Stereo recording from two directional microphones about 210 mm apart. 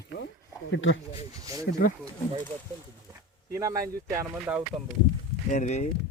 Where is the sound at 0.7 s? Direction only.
65° left (ahead or behind).